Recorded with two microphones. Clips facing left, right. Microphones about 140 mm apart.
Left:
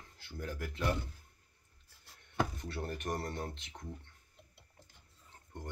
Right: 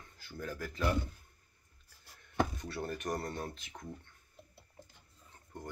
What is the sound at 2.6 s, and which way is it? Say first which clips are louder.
Speech: right 1 dB; 25° left (ahead or behind).